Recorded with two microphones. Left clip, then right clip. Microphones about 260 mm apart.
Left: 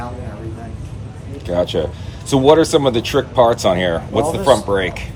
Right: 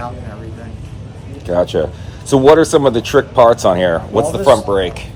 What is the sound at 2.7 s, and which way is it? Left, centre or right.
Speech, centre.